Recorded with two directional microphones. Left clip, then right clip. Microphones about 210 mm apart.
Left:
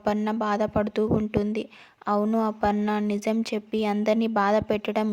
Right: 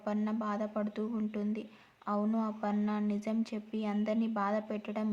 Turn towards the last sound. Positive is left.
turn(degrees=40)  # may be behind; listen again after turning